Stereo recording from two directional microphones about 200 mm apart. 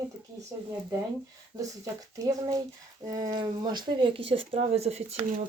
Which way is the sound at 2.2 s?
15° right (ahead or behind).